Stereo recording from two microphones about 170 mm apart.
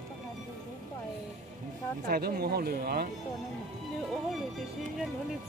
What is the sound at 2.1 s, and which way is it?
Speech, 65° right (ahead or behind).